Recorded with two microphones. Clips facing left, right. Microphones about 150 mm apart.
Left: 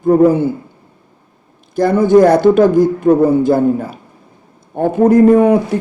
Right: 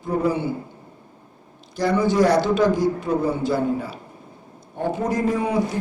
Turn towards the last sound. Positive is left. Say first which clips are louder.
# left 12 dB
turn(degrees=60)  # may be behind; listen again after turning